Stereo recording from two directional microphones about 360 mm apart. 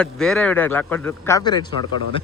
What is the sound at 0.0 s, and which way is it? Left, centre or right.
A man's voice, centre.